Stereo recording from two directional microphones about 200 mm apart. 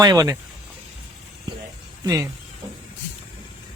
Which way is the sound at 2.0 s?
15° right (ahead or behind).